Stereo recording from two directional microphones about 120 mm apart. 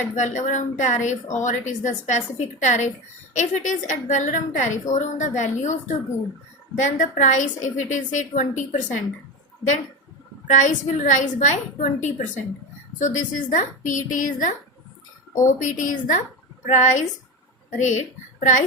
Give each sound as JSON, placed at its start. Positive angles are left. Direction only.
{"t": 0.2, "sound": "a woman's voice", "side_deg": 90}
{"t": 10.4, "sound": "a woman's voice", "side_deg": 90}